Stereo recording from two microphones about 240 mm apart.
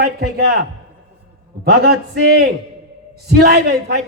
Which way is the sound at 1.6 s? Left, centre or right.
Right.